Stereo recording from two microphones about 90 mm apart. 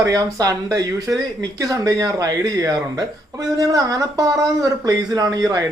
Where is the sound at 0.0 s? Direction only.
45° right (ahead or behind).